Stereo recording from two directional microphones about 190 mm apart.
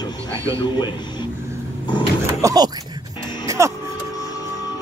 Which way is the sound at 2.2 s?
20° right (ahead or behind).